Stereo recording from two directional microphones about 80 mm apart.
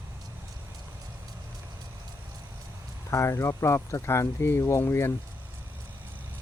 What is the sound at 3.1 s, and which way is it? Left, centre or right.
Speech, left.